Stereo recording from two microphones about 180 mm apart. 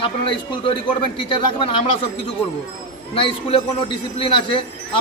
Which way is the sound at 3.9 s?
30° left (ahead or behind).